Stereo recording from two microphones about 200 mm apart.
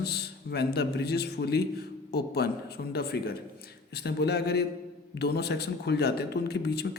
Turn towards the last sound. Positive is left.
turn(degrees=55)  # may be behind; listen again after turning